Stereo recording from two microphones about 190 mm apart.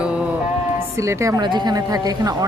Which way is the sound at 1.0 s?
15° right (ahead or behind).